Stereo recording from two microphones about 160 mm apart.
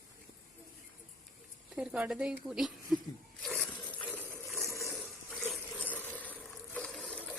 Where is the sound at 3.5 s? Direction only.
5° left (ahead or behind).